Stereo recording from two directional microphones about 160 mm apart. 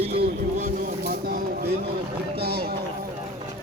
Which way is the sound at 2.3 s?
80° right.